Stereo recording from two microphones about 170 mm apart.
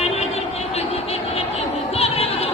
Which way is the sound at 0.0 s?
40° left (ahead or behind).